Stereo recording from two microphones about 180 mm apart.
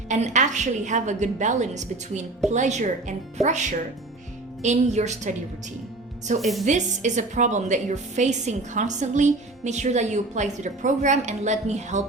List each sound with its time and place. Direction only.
0.1 s a woman's voice: 40° right (ahead or behind)
6.4 s a woman's voice: centre (ahead or behind)
6.7 s a woman's voice: 40° right (ahead or behind)